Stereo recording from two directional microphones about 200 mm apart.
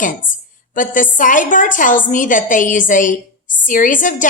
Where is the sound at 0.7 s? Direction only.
40° left (ahead or behind).